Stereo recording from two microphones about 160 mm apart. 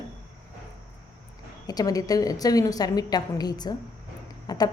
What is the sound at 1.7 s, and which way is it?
A woman's voice, 25° left (ahead or behind).